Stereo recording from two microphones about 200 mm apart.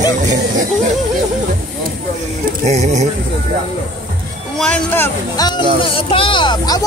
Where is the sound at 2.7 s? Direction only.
35° right (ahead or behind).